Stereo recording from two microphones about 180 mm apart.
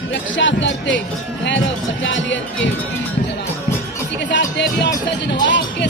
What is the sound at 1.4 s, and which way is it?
Music, 90° left.